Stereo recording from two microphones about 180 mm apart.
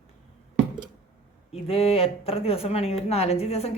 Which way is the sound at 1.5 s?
35° left (ahead or behind).